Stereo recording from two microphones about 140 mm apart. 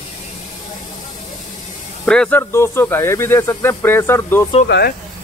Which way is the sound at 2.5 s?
15° left (ahead or behind).